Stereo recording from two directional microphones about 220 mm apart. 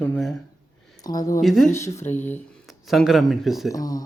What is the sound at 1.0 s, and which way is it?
Speech, 15° left (ahead or behind).